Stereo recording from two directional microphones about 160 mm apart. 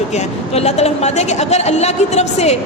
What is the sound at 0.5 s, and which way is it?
Speech, 40° left (ahead or behind).